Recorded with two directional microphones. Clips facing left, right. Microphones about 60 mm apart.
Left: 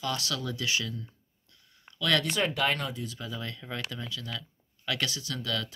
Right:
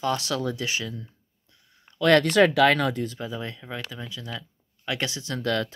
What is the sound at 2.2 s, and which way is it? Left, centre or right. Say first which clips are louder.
Speech: right 10 dB; right.